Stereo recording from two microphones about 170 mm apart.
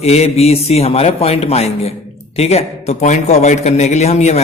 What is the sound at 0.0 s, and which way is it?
A man's voice, 40° left (ahead or behind).